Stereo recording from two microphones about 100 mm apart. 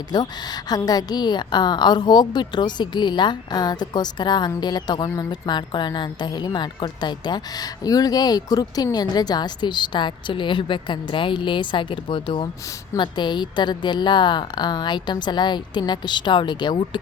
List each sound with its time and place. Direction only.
0.1 s a woman's voice: 40° left (ahead or behind)